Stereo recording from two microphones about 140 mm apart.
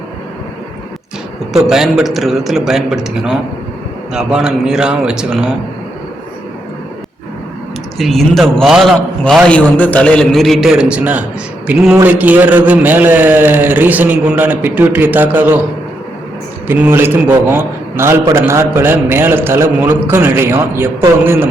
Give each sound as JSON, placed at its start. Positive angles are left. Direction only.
{"t": 1.6, "sound": "a man's voice", "side_deg": 0}
{"t": 7.9, "sound": "a man's voice", "side_deg": 0}
{"t": 16.6, "sound": "a man's voice", "side_deg": -15}